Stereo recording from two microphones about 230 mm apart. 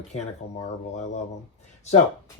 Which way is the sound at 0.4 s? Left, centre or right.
Left.